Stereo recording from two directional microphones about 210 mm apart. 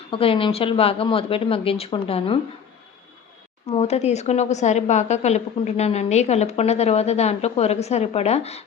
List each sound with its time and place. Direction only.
0.1 s speech: 25° left (ahead or behind)
3.7 s a woman's voice: 30° left (ahead or behind)